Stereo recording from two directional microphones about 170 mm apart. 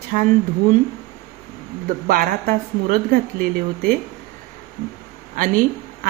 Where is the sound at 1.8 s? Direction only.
55° right (ahead or behind).